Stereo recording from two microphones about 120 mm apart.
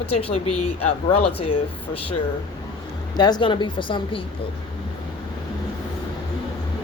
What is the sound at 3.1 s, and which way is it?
A woman's voice, 35° left (ahead or behind).